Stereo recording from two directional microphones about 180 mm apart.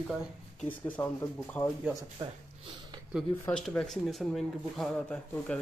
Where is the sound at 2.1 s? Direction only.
25° right (ahead or behind).